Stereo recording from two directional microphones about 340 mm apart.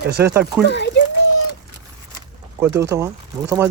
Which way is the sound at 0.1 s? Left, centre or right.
Right.